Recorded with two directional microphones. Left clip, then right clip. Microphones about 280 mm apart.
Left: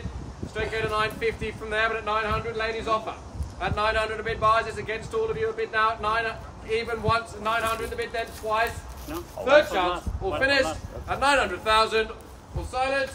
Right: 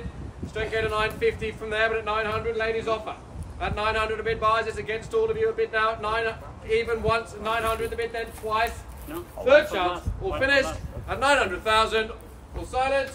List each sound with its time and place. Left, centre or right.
0.6 s a man's voice: centre
9.8 s a man's voice: left
11.1 s a man's voice: centre